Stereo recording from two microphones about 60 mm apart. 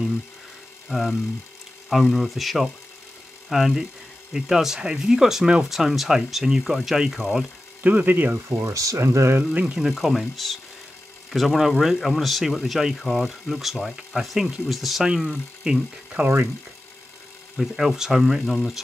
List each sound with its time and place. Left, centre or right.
0.8 s speech: centre
7.8 s speech: right
8.7 s speech: right
9.5 s speech: right
9.8 s speech: centre
15.0 s speech: centre
17.6 s speech: centre